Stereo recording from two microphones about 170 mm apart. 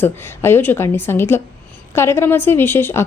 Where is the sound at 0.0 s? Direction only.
15° left (ahead or behind).